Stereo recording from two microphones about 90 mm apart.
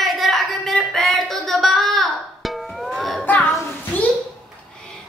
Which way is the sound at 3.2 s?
20° left (ahead or behind).